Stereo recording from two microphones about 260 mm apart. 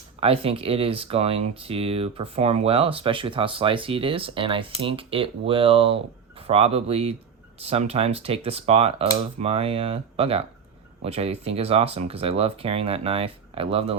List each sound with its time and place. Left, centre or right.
0.2 s speech: right